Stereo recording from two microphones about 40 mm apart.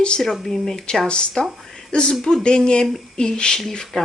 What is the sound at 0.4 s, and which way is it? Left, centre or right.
Speech, centre.